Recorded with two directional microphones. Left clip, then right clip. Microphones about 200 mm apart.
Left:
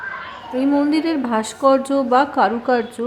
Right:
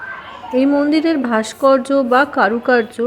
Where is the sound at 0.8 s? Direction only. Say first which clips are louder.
Right 3 dB; 10° right (ahead or behind).